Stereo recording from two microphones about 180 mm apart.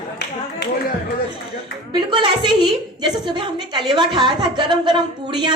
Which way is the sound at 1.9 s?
25° right (ahead or behind).